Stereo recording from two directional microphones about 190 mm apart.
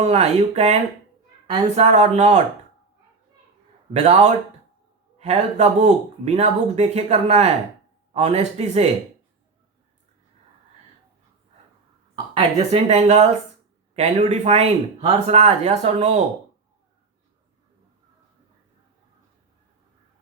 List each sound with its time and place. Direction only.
0.0 s speech: 35° right (ahead or behind)
3.9 s speech: 35° right (ahead or behind)
12.4 s speech: 35° right (ahead or behind)